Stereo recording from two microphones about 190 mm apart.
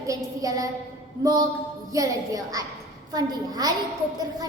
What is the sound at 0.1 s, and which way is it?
Child singing, 15° right (ahead or behind).